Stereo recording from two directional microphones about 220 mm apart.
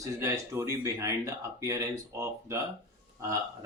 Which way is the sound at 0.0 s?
15° right (ahead or behind).